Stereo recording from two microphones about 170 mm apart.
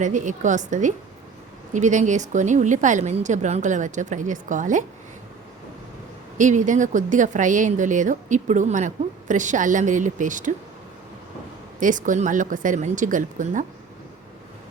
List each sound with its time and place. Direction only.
0.0 s a woman's voice: 45° right (ahead or behind)
6.3 s a woman's voice: 45° right (ahead or behind)
11.8 s a woman's voice: 50° right (ahead or behind)